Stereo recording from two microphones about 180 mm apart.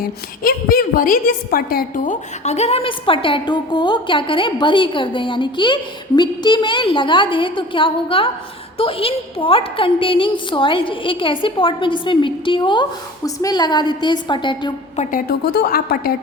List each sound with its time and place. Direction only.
0.0 s a woman's voice: 55° left (ahead or behind)
2.4 s a woman's voice: 40° left (ahead or behind)
14.9 s a woman's voice: 55° left (ahead or behind)